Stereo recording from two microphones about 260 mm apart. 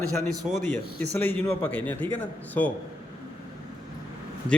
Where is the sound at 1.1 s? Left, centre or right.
Centre.